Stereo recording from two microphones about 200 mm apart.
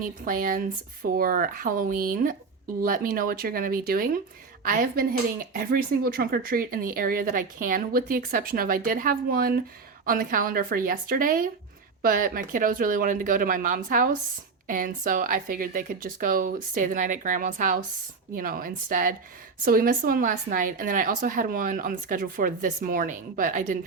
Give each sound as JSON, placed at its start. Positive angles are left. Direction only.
{"t": 0.0, "sound": "a woman's voice", "side_deg": -45}